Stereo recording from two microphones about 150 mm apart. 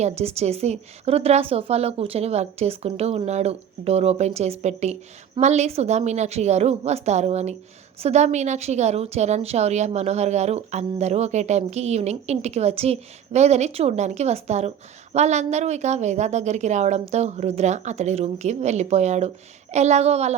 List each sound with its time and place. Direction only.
0.0 s a woman's voice: 45° right (ahead or behind)